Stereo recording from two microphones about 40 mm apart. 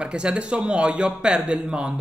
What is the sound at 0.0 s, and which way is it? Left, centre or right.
A woman's voice, right.